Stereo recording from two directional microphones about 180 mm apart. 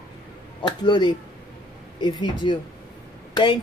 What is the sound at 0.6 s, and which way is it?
Speech, 25° left (ahead or behind).